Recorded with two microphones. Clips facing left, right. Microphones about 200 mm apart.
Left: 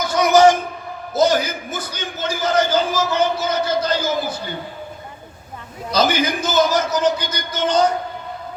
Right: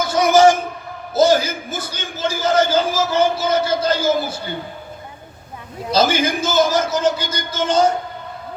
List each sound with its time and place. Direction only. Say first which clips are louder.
0.0 s a sound: even; 25° right (ahead or behind)
1.1 s a man's voice: right 2 dB; 25° right (ahead or behind)
5.9 s a man's voice: right 1 dB; 25° right (ahead or behind)